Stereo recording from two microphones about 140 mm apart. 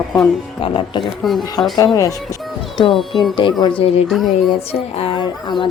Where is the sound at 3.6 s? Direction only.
40° left (ahead or behind).